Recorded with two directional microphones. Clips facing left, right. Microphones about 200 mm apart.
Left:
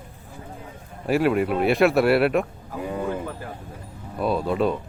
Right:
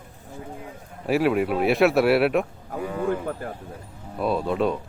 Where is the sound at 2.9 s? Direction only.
20° left (ahead or behind).